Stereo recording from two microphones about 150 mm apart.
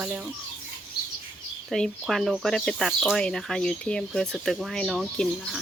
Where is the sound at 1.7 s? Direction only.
Centre (ahead or behind).